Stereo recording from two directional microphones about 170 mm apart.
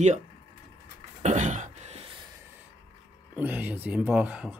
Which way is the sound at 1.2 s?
45° right (ahead or behind).